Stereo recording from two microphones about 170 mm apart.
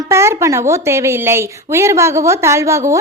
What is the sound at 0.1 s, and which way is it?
A woman's voice, 15° right (ahead or behind).